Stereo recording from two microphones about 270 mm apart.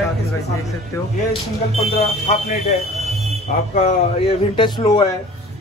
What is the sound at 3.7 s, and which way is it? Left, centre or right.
A man's voice, left.